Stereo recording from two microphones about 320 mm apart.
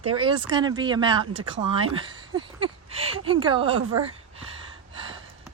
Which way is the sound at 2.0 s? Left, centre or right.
Centre.